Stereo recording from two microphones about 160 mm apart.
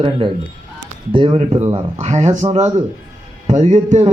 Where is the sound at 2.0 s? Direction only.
45° right (ahead or behind).